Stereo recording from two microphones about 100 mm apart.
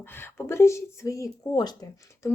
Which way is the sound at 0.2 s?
25° left (ahead or behind).